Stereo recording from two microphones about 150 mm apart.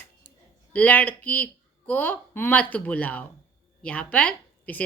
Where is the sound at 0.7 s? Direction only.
10° left (ahead or behind).